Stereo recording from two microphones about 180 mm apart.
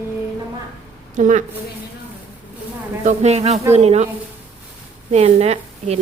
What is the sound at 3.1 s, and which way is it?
Speech, 35° right (ahead or behind).